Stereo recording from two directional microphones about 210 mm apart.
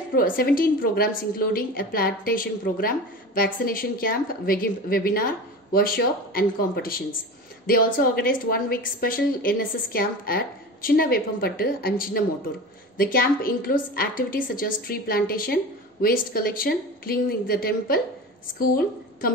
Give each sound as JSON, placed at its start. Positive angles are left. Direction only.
{"t": 0.1, "sound": "a woman's voice", "side_deg": 45}